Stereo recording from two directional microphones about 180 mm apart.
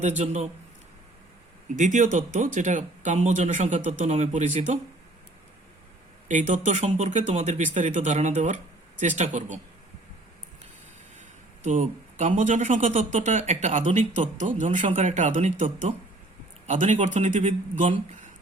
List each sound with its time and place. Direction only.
0.2 s speech: 40° right (ahead or behind)
1.7 s speech: 45° right (ahead or behind)
6.2 s speech: 45° right (ahead or behind)
11.6 s speech: 45° right (ahead or behind)